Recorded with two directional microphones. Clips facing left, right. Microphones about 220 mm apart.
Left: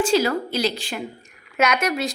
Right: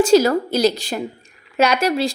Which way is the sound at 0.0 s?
40° right (ahead or behind).